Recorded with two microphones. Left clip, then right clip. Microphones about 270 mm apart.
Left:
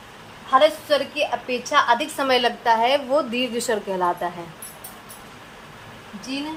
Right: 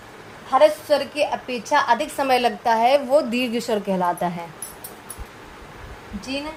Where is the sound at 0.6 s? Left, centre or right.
Right.